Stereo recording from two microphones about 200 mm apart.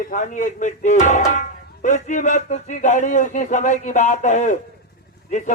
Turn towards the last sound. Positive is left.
turn(degrees=35)  # may be behind; listen again after turning